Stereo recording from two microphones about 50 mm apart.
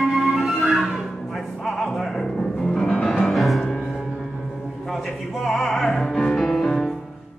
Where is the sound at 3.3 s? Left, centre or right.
Centre.